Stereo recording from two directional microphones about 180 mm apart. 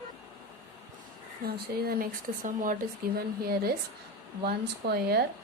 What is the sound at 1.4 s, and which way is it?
Speech, 55° right (ahead or behind).